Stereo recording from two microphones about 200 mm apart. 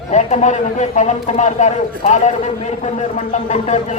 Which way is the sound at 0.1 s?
35° left (ahead or behind).